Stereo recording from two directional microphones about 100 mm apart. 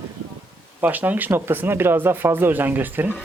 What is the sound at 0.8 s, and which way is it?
Speech, 15° right (ahead or behind).